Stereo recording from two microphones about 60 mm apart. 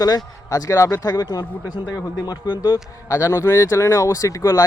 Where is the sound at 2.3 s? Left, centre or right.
Left.